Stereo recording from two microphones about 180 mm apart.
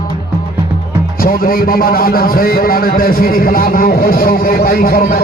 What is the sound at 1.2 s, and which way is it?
A man's voice, 55° left (ahead or behind).